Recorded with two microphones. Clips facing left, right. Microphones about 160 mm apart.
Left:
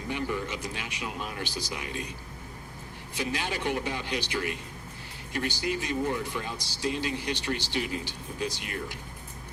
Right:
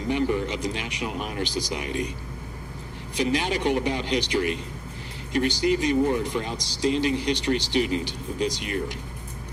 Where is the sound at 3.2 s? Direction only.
15° right (ahead or behind).